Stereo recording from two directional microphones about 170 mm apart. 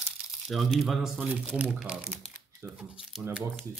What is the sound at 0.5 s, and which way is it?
Speech, centre (ahead or behind).